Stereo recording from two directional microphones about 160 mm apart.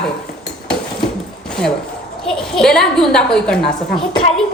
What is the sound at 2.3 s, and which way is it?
A woman's voice, 5° left (ahead or behind).